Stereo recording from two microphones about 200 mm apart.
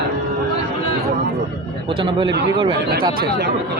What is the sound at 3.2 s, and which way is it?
Speech, 55° right (ahead or behind).